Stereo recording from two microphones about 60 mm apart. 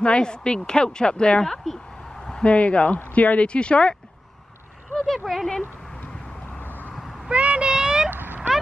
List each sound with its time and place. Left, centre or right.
0.0 s speech: centre
5.0 s speech: centre
7.2 s child singing: centre
8.1 s vehicle: right